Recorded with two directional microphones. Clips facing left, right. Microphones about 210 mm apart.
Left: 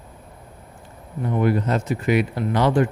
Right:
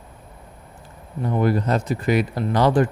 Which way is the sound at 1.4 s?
35° right (ahead or behind).